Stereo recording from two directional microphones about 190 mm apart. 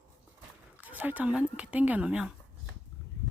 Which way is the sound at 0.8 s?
10° right (ahead or behind).